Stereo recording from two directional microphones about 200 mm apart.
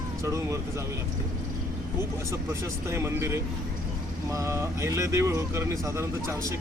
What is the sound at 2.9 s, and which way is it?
Speech, 15° right (ahead or behind).